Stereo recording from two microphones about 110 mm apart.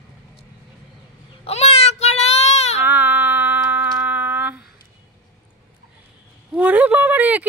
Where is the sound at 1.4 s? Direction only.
75° left (ahead or behind).